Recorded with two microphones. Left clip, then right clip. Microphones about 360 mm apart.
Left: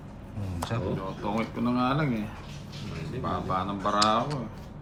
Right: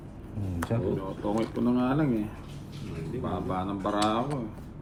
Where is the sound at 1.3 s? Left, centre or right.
Centre.